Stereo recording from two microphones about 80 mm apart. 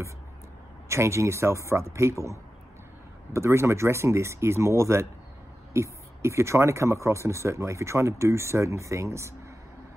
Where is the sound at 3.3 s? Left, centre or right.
Right.